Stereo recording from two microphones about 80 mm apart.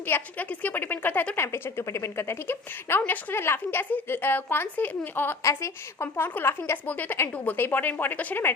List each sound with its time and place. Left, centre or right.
0.1 s speech: left
1.4 s a woman's voice: left
5.4 s a woman's voice: left
6.1 s speech: left